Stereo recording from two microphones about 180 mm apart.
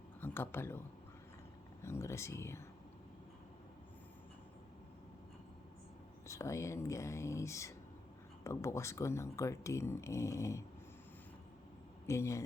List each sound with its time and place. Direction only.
0.2 s speech: 10° left (ahead or behind)
1.8 s speech: 15° left (ahead or behind)
6.2 s speech: 15° left (ahead or behind)
12.0 s speech: 15° left (ahead or behind)